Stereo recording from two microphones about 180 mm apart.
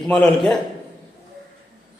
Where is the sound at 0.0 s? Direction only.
5° left (ahead or behind).